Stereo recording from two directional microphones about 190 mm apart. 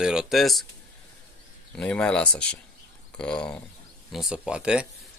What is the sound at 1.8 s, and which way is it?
Speech, 5° left (ahead or behind).